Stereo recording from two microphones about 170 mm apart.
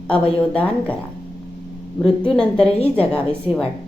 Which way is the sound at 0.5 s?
5° left (ahead or behind).